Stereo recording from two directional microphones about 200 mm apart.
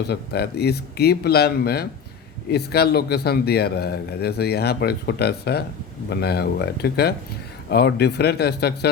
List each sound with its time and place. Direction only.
0.1 s speech: 55° left (ahead or behind)